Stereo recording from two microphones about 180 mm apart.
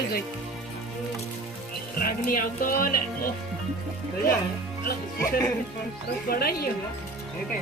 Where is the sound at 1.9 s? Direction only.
55° left (ahead or behind).